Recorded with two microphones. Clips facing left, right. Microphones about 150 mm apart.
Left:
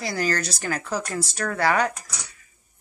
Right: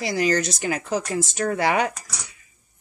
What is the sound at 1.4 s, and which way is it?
Speech, 25° right (ahead or behind).